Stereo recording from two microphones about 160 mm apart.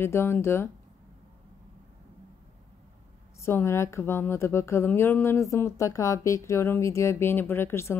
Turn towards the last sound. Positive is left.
turn(degrees=15)  # may be behind; listen again after turning